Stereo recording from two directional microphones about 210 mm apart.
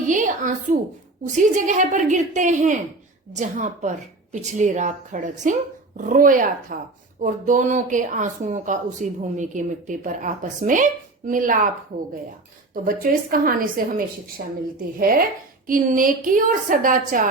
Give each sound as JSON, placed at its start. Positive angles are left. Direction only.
{"t": 0.1, "sound": "speech", "side_deg": -40}
{"t": 12.7, "sound": "speech", "side_deg": -40}
{"t": 14.9, "sound": "speech", "side_deg": -45}